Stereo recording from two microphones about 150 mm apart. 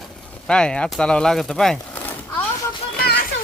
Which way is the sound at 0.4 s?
5° left (ahead or behind).